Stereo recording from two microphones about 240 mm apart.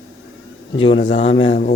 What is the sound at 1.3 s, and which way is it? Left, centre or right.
Speech, left.